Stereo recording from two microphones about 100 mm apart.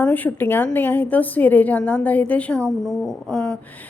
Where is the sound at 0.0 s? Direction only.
15° left (ahead or behind).